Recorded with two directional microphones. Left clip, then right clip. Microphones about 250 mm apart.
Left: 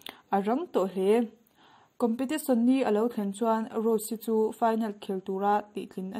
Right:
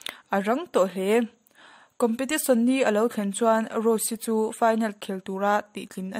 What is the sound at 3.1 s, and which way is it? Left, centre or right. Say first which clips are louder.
Speech: right 3 dB; right.